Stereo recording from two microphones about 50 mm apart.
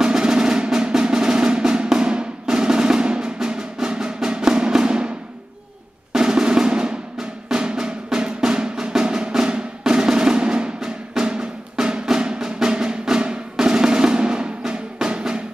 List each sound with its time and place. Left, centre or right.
0.0 s percussion: centre
6.1 s drum roll: centre